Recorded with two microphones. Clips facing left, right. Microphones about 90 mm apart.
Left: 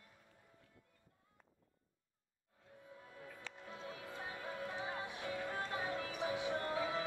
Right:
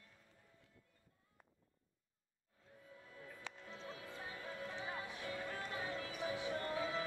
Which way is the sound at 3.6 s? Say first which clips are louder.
Left 4 dB; 15° left (ahead or behind).